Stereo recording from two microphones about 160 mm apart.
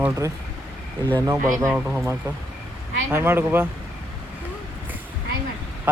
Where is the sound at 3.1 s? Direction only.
15° right (ahead or behind).